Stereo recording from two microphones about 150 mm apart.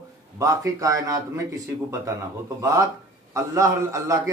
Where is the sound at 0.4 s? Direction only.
20° right (ahead or behind).